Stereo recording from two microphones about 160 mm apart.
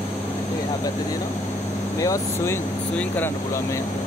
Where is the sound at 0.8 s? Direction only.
25° left (ahead or behind).